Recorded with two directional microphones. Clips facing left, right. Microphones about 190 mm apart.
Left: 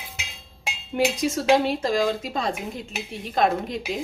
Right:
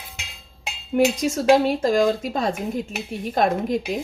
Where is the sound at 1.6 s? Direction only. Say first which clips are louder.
Right 4 dB; 45° right (ahead or behind).